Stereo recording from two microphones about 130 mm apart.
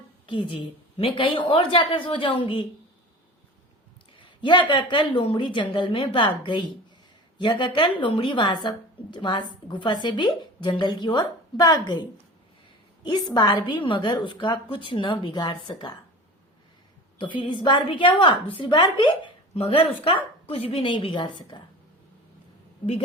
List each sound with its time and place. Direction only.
0.3 s a woman's voice: 40° left (ahead or behind)
4.2 s a woman's voice: 40° left (ahead or behind)
13.3 s a woman's voice: 40° left (ahead or behind)
17.2 s a woman's voice: 40° left (ahead or behind)